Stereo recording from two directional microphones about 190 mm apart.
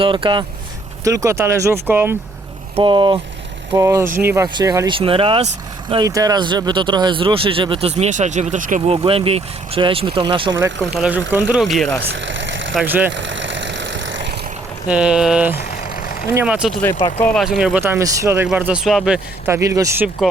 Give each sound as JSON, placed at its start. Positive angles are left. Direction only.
{"t": 0.0, "sound": "speech", "side_deg": -25}
{"t": 2.7, "sound": "speech", "side_deg": -25}
{"t": 10.9, "sound": "speech", "side_deg": -5}
{"t": 12.1, "sound": "vehicle", "side_deg": -80}
{"t": 12.7, "sound": "speech", "side_deg": -10}
{"t": 13.1, "sound": "vehicle", "side_deg": -75}
{"t": 14.8, "sound": "speech", "side_deg": -5}
{"t": 15.5, "sound": "vehicle", "side_deg": 50}
{"t": 16.3, "sound": "speech", "side_deg": -5}
{"t": 17.2, "sound": "speech", "side_deg": 10}
{"t": 17.4, "sound": "speech", "side_deg": 0}
{"t": 17.7, "sound": "speech", "side_deg": -15}
{"t": 19.5, "sound": "speech", "side_deg": -15}